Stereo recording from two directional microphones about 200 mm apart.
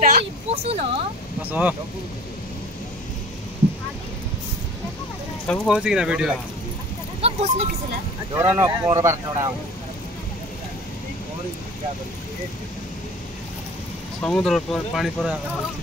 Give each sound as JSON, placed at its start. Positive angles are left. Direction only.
{"t": 0.2, "sound": "speech", "side_deg": -30}
{"t": 1.5, "sound": "speech", "side_deg": -10}
{"t": 5.5, "sound": "speech", "side_deg": -5}
{"t": 7.2, "sound": "speech", "side_deg": -30}
{"t": 8.4, "sound": "speech", "side_deg": -15}
{"t": 14.2, "sound": "speech", "side_deg": 5}